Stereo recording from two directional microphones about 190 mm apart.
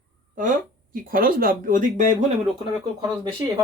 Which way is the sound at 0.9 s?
50° right (ahead or behind).